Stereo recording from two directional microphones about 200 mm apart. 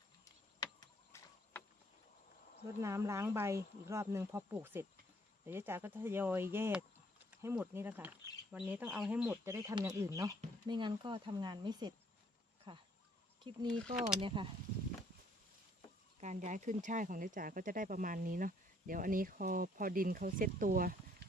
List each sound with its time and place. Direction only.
0.6 s a sound: 15° left (ahead or behind)
2.8 s speech: 15° right (ahead or behind)
16.2 s speech: 35° right (ahead or behind)